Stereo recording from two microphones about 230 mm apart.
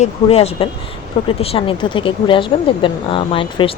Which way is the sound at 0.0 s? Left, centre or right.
Left.